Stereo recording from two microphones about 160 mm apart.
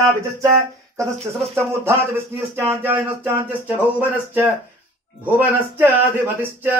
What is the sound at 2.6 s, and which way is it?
Speech, 15° right (ahead or behind).